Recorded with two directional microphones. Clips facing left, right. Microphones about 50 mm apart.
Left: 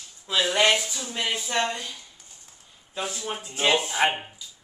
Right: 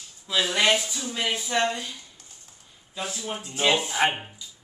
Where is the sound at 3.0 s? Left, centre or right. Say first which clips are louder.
Left 1 dB; centre.